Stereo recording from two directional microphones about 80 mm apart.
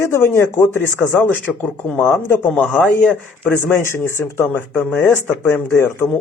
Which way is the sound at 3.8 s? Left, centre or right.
Left.